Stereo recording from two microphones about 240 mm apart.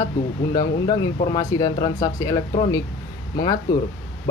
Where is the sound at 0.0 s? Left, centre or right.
Centre.